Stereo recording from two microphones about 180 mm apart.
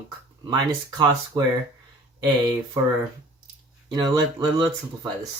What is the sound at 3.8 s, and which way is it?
Speech, 25° right (ahead or behind).